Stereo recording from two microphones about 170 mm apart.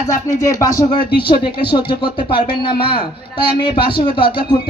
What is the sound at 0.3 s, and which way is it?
Speech, 20° left (ahead or behind).